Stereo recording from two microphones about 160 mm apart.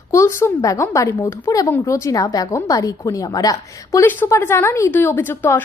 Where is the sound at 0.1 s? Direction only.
20° left (ahead or behind).